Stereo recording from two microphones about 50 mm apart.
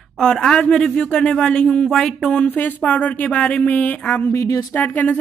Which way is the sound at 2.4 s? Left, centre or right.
Left.